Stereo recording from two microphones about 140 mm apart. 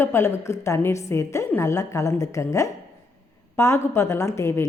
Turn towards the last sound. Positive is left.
turn(degrees=20)  # may be behind; listen again after turning